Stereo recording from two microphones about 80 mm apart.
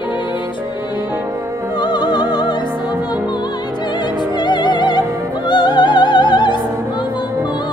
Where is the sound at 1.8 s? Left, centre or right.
Left.